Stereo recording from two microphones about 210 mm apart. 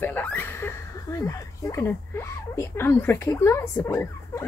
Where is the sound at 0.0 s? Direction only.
5° left (ahead or behind).